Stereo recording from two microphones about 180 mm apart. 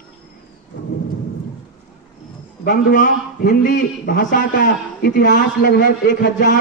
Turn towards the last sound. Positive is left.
turn(degrees=60)  # may be behind; listen again after turning